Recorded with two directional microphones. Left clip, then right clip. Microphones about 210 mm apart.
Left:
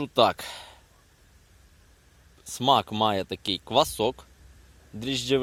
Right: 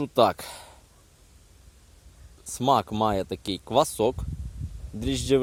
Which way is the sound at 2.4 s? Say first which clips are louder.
Left 1 dB; 5° right (ahead or behind).